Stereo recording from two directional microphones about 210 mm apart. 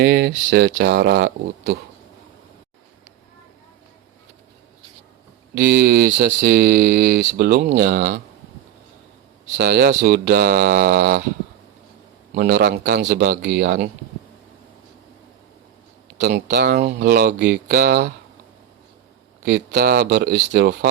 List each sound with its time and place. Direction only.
0.0 s speech: 50° right (ahead or behind)
5.5 s speech: 50° right (ahead or behind)
9.6 s speech: 50° right (ahead or behind)
12.3 s speech: 50° right (ahead or behind)
16.1 s speech: 50° right (ahead or behind)
19.4 s speech: 50° right (ahead or behind)